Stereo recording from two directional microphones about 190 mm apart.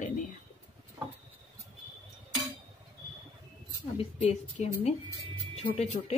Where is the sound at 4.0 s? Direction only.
35° left (ahead or behind).